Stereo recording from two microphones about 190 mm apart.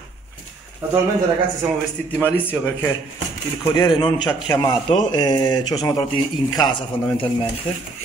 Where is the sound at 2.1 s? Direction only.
10° left (ahead or behind).